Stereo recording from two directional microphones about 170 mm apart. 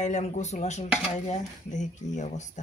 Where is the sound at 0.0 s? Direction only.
45° left (ahead or behind).